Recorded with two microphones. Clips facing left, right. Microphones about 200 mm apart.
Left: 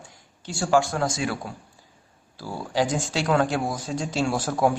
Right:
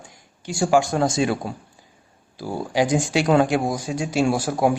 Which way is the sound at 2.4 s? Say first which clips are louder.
Right 3 dB; 15° right (ahead or behind).